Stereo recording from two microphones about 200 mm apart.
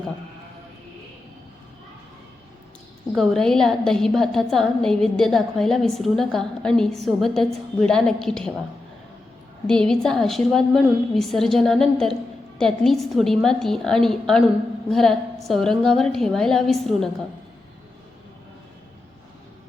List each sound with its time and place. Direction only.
3.2 s a woman's voice: 5° left (ahead or behind)
9.6 s a woman's voice: 5° left (ahead or behind)